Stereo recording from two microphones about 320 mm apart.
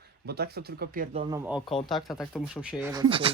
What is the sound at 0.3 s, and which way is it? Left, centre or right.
Speech, right.